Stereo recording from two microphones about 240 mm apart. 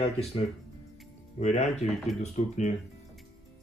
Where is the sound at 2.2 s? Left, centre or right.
Left.